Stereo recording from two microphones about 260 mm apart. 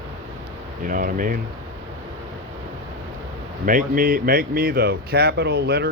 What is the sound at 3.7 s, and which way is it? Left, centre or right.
Speech, right.